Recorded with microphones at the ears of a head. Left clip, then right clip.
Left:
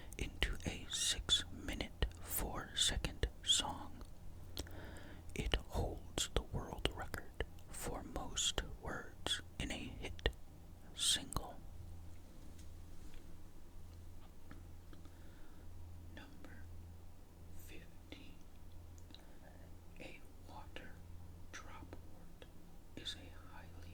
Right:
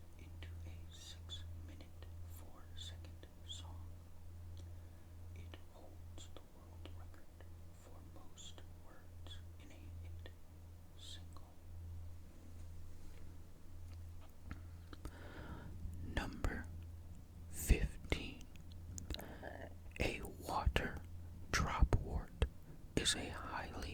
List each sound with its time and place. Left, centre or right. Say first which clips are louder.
0.2 s whispering: left 19 dB; left
14.8 s whispering: right 10 dB; right